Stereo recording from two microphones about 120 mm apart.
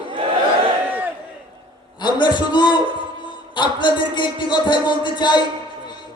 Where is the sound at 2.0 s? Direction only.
40° left (ahead or behind).